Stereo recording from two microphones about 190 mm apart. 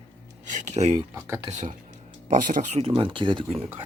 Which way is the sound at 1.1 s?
15° right (ahead or behind).